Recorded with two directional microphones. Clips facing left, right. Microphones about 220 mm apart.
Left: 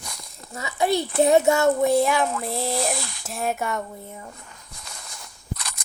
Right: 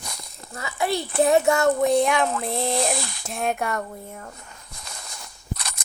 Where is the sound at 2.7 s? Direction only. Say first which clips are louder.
Right 2 dB; 25° right (ahead or behind).